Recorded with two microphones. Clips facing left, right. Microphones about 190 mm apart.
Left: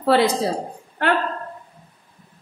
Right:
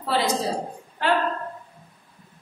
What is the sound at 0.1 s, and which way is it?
A woman's voice, 60° left (ahead or behind).